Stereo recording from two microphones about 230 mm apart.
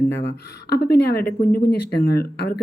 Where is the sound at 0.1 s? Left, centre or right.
Left.